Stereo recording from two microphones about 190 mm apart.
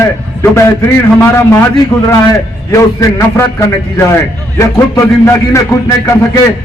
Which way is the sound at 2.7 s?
15° left (ahead or behind).